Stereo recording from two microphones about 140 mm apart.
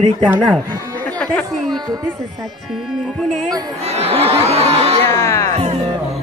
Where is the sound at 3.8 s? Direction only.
45° right (ahead or behind).